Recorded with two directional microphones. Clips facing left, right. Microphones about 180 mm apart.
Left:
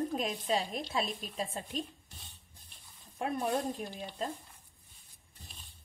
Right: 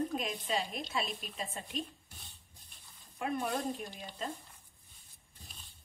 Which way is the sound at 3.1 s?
35° left (ahead or behind).